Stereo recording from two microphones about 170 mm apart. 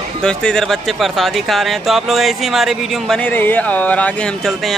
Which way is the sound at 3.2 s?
10° left (ahead or behind).